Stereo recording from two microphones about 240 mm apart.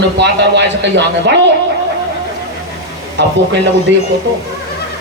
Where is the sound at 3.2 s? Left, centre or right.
Right.